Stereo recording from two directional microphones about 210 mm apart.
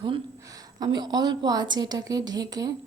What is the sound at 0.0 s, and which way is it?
A woman's voice, 20° right (ahead or behind).